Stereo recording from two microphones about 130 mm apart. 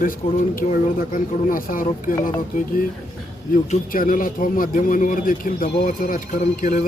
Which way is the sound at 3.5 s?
90° left.